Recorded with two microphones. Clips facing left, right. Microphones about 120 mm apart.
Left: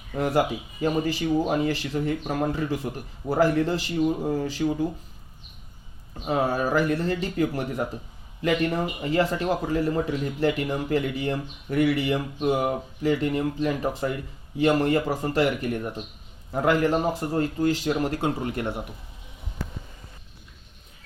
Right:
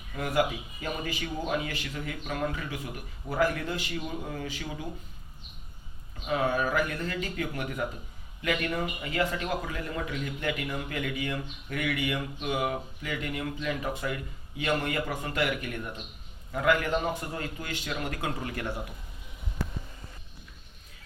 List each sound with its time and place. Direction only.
0.1 s speech: 35° left (ahead or behind)
6.1 s speech: 35° left (ahead or behind)